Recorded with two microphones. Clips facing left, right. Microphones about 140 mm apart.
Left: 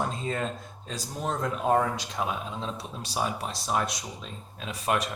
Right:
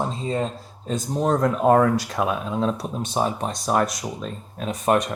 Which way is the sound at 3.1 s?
40° right (ahead or behind).